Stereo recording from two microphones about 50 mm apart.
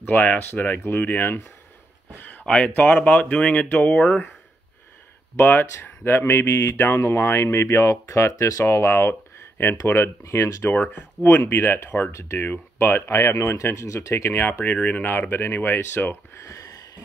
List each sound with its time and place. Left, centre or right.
0.0 s speech: left
2.1 s a sound: left
2.4 s speech: left
5.4 s speech: left
10.7 s speech: left
11.2 s speech: left
12.1 s speech: left
12.7 s speech: left
14.3 s speech: left
14.6 s speech: left
15.0 s speech: left